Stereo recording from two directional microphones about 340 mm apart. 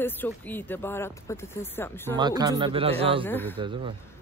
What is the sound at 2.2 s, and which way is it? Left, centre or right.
Speech, centre.